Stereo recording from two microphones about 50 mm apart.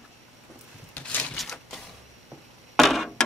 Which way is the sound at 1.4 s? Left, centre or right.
Centre.